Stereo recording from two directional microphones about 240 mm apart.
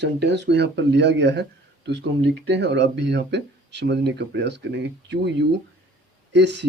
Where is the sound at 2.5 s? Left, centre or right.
Right.